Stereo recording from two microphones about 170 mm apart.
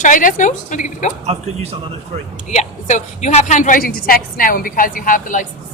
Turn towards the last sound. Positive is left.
turn(degrees=50)  # may be behind; listen again after turning